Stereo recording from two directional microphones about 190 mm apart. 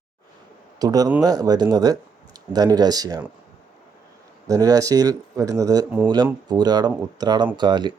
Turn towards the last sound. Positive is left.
turn(degrees=-25)  # may be behind; listen again after turning